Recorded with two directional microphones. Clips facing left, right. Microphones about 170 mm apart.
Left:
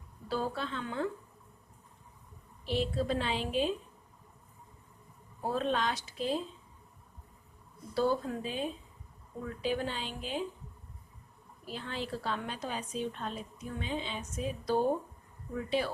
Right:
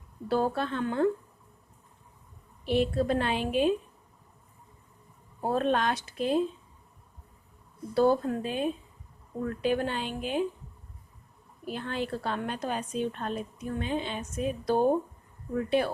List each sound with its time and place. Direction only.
0.3 s a woman's voice: 55° right (ahead or behind)
2.6 s a woman's voice: 60° right (ahead or behind)
5.4 s a woman's voice: 55° right (ahead or behind)
7.9 s a woman's voice: 55° right (ahead or behind)
11.6 s a woman's voice: 55° right (ahead or behind)